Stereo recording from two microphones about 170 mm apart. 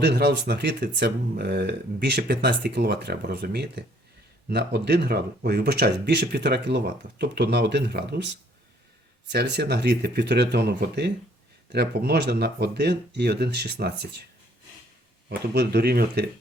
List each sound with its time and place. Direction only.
0.0 s speech: 70° right (ahead or behind)
15.3 s speech: 70° right (ahead or behind)